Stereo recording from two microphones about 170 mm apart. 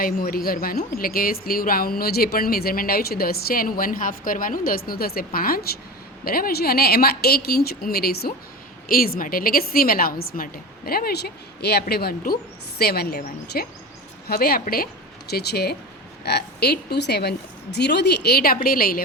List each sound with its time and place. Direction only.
0.0 s a woman's voice: 60° left (ahead or behind)
15.3 s a woman's voice: 70° left (ahead or behind)